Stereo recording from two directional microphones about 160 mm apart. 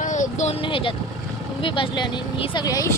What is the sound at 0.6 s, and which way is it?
Speech, 35° left (ahead or behind).